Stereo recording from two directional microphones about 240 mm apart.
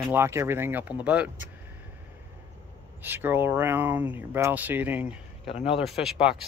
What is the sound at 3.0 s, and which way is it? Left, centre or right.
Speech, centre.